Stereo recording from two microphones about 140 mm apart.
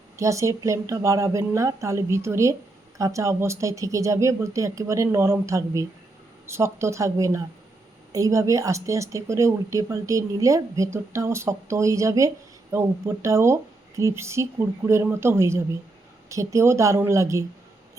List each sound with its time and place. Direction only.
0.2 s a woman's voice: 20° right (ahead or behind)